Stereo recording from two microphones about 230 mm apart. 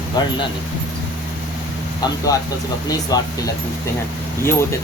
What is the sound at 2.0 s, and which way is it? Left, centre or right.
Speech, centre.